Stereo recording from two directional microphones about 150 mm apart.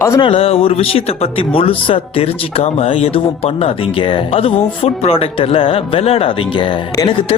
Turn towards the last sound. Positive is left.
turn(degrees=35)  # may be behind; listen again after turning